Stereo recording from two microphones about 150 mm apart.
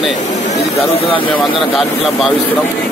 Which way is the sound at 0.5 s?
40° left (ahead or behind).